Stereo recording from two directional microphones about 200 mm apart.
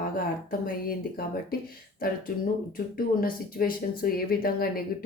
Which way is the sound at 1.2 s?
50° left (ahead or behind).